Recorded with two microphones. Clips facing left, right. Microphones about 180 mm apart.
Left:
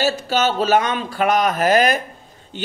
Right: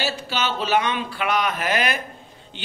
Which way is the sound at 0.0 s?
45° left (ahead or behind).